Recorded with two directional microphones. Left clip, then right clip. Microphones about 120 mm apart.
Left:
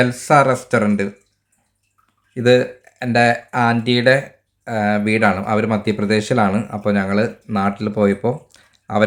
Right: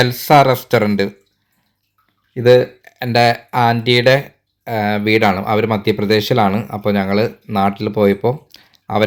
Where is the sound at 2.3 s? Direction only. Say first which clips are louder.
Right 3 dB; 20° right (ahead or behind).